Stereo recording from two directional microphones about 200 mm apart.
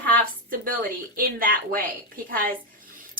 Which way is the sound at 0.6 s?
45° right (ahead or behind).